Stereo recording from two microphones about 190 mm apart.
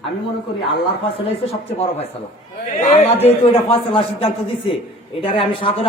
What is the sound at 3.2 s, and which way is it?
A man's voice, 30° left (ahead or behind).